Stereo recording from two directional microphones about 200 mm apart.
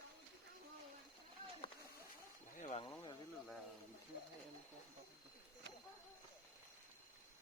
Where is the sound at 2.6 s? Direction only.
40° left (ahead or behind).